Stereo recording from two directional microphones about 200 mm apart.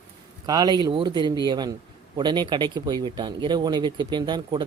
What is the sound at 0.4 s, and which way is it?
Speech, 20° right (ahead or behind).